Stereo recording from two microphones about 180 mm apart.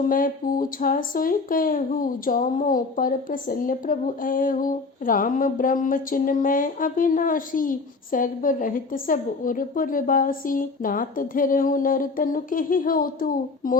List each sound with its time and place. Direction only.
0.0 s speech: 50° left (ahead or behind)